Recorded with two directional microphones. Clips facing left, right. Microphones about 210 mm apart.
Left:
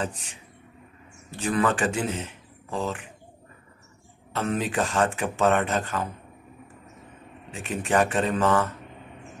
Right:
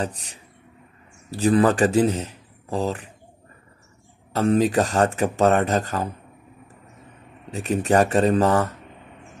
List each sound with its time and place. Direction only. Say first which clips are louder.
0.0 s a man's voice: right 3 dB; 35° right (ahead or behind)
4.3 s speech: right 8 dB; 40° right (ahead or behind)
7.5 s speech: right 5 dB; 40° right (ahead or behind)